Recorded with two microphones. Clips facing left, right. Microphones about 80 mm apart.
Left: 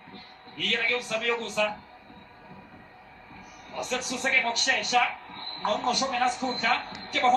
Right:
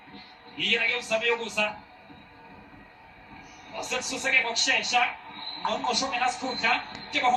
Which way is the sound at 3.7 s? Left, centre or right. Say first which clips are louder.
Left 1 dB; left.